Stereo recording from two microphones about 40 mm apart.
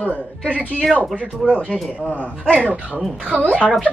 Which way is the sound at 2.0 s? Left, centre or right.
Left.